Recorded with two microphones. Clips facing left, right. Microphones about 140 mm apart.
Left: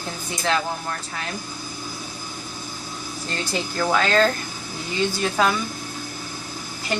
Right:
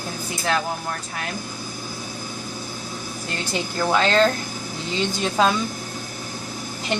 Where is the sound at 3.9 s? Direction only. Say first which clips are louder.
Right 1 dB; 25° right (ahead or behind).